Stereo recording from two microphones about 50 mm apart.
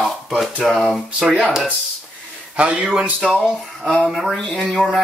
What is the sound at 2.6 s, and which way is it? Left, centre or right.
Speech, right.